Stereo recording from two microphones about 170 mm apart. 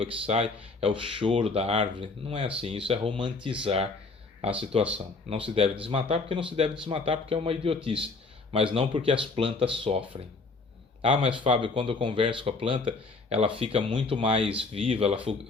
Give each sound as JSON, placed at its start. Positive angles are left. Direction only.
{"t": 0.0, "sound": "speech", "side_deg": -35}
{"t": 4.9, "sound": "speech", "side_deg": -35}